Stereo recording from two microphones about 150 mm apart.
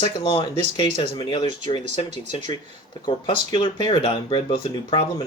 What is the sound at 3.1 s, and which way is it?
Speech, 35° left (ahead or behind).